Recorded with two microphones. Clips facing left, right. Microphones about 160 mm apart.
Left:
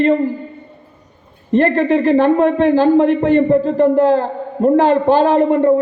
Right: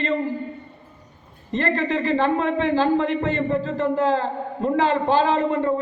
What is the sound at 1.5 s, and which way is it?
A man's voice, 55° left (ahead or behind).